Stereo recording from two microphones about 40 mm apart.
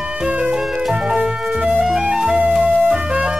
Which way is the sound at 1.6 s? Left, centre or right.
Right.